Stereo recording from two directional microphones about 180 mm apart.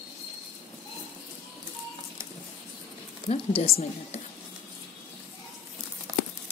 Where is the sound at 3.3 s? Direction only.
35° left (ahead or behind).